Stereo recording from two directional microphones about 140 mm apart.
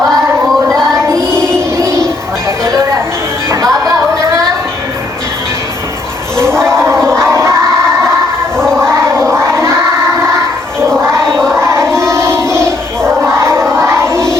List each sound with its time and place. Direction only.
0.7 s child singing: 5° left (ahead or behind)
1.5 s music: 20° right (ahead or behind)
3.5 s music: 25° right (ahead or behind)
6.4 s a sound: 20° right (ahead or behind)
7.0 s crowd: 5° left (ahead or behind)
8.5 s a sound: 5° left (ahead or behind)
9.0 s crowd: 20° right (ahead or behind)
11.3 s choir: 5° left (ahead or behind)
11.6 s child singing: 20° right (ahead or behind)
13.1 s music: 20° right (ahead or behind)